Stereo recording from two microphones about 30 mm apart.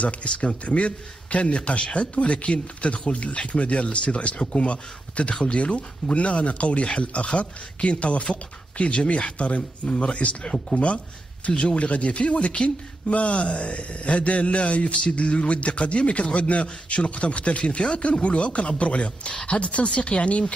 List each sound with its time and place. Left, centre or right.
0.0 s a man's voice: left
5.3 s speech: left
5.6 s a man's voice: left